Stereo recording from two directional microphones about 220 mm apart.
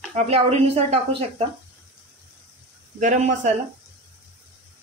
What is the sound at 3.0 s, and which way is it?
Speech, 35° right (ahead or behind).